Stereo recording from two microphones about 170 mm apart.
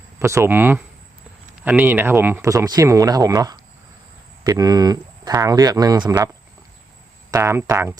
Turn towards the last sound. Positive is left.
turn(degrees=-15)  # may be behind; listen again after turning